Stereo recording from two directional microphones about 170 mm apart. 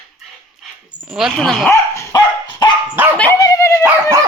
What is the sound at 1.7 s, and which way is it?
Dog, 15° left (ahead or behind).